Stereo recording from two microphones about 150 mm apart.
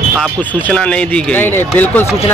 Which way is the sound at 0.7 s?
5° left (ahead or behind).